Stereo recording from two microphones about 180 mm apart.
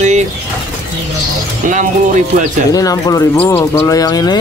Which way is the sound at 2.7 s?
20° left (ahead or behind).